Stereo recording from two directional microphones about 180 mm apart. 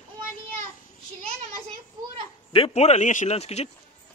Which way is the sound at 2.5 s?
35° left (ahead or behind).